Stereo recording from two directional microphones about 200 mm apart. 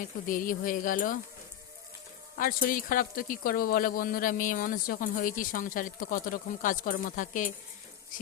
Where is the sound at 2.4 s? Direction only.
45° left (ahead or behind).